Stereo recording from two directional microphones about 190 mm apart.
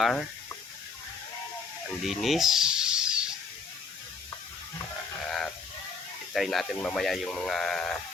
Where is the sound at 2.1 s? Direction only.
Centre (ahead or behind).